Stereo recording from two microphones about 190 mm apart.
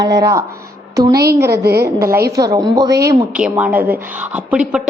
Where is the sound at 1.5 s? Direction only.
60° right (ahead or behind).